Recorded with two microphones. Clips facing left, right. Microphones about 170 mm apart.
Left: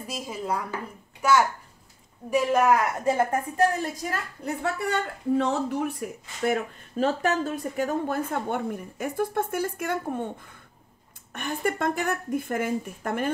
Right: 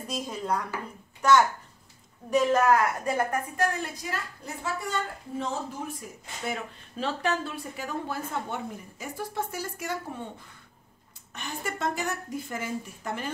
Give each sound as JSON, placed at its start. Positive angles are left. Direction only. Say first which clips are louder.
{"t": 0.0, "sound": "speech", "louder": "even", "side_deg": 5}
{"t": 4.0, "sound": "speech", "louder": "left 4 dB", "side_deg": 50}
{"t": 4.7, "sound": "speech", "louder": "left 4 dB", "side_deg": 65}
{"t": 11.3, "sound": "speech", "louder": "left 7 dB", "side_deg": 55}